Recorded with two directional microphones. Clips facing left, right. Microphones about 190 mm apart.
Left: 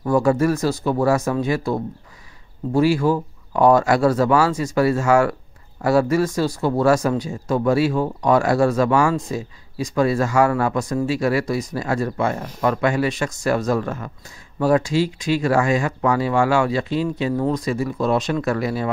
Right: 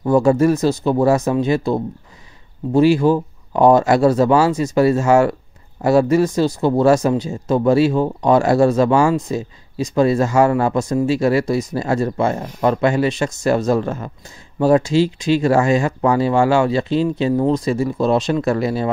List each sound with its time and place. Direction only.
0.0 s speech: 25° right (ahead or behind)